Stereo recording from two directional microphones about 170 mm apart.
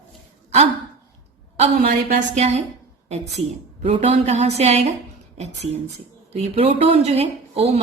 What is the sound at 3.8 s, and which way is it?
A woman's voice, 40° right (ahead or behind).